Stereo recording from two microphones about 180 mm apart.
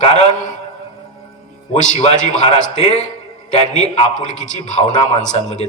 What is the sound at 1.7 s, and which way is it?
A man's voice, 40° left (ahead or behind).